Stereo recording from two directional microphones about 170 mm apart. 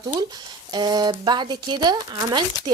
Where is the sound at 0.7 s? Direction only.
25° right (ahead or behind).